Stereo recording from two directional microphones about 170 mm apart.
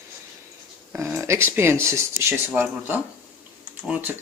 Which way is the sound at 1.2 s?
15° right (ahead or behind).